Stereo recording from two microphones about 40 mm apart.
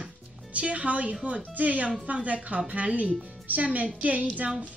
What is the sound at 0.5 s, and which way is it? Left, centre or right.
A woman's voice, right.